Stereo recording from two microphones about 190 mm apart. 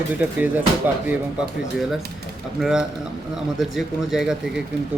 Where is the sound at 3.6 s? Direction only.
Centre (ahead or behind).